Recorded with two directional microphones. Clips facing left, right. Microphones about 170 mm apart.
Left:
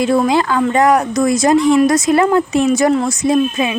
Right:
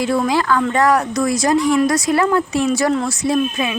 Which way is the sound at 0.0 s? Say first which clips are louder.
Left 4 dB; 20° left (ahead or behind).